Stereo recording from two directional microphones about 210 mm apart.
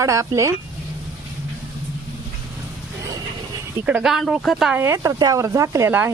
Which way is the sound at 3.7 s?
5° right (ahead or behind).